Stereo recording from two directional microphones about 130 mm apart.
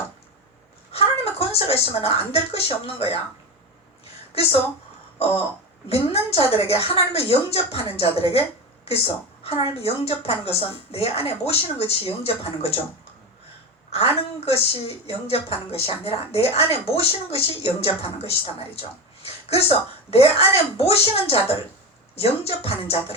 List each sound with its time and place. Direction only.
0.9 s speech: 50° left (ahead or behind)
4.3 s a woman's voice: 50° left (ahead or behind)
5.9 s a woman's voice: 50° left (ahead or behind)
13.9 s a woman's voice: 50° left (ahead or behind)